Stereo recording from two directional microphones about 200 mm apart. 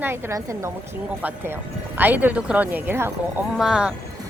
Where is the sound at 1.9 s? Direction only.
10° right (ahead or behind).